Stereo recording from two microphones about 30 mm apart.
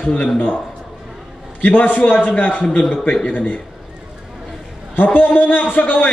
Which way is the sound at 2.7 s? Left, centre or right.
Left.